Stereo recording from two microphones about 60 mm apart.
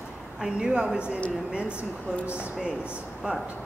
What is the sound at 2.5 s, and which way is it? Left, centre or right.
Speech, centre.